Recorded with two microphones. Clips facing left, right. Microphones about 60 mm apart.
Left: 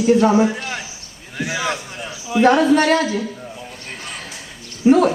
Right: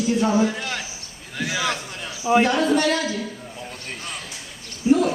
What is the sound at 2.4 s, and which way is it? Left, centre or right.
Speech, left.